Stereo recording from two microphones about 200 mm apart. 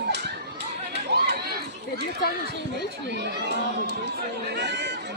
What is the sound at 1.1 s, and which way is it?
Run, 55° right (ahead or behind).